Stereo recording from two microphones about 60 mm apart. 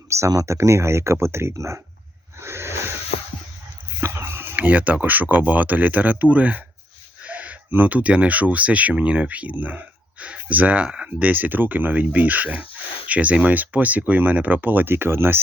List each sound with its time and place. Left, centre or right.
0.1 s speech: right
2.4 s a sound: right
4.0 s dog: right
4.5 s speech: right